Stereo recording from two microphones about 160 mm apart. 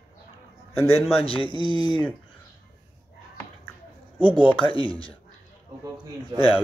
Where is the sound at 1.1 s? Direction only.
35° left (ahead or behind).